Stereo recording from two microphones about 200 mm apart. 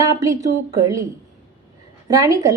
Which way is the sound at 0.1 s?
15° right (ahead or behind).